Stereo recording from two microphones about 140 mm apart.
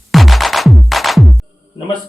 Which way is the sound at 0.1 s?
Centre (ahead or behind).